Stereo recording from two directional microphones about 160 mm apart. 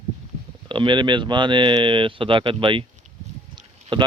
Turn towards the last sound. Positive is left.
turn(degrees=-30)  # may be behind; listen again after turning